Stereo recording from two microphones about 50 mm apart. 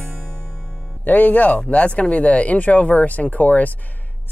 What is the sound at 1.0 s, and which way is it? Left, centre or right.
Speech, left.